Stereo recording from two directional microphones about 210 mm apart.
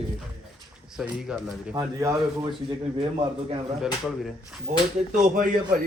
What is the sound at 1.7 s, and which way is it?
Speech, 15° right (ahead or behind).